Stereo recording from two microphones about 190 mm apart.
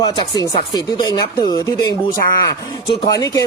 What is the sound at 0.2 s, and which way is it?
Speech, 20° left (ahead or behind).